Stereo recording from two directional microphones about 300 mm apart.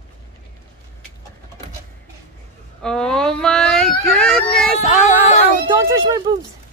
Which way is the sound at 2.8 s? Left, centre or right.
Centre.